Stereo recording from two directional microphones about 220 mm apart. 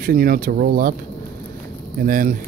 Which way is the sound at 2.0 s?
40° right (ahead or behind).